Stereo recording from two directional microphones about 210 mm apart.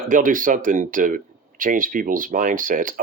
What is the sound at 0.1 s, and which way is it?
Speech, 40° right (ahead or behind).